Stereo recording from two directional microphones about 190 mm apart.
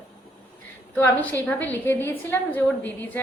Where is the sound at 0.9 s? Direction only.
10° left (ahead or behind).